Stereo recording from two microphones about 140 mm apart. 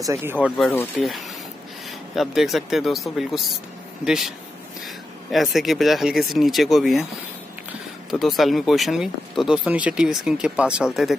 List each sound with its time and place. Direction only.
0.0 s speech: 20° right (ahead or behind)
0.6 s speech: 10° left (ahead or behind)
0.9 s speech: centre (ahead or behind)
8.1 s speech: centre (ahead or behind)